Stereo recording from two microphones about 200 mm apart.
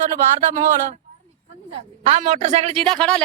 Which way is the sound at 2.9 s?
5° left (ahead or behind).